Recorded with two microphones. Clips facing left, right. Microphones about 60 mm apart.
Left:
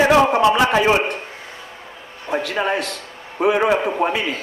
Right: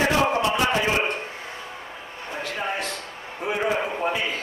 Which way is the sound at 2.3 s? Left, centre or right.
Left.